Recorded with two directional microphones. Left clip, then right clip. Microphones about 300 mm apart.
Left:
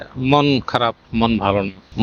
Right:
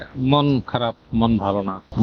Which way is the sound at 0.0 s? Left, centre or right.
Left.